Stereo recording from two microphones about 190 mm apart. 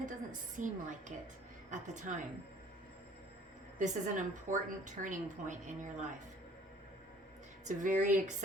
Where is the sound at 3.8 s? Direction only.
40° right (ahead or behind).